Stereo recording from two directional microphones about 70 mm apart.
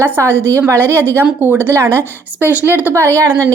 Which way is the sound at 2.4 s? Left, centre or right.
Right.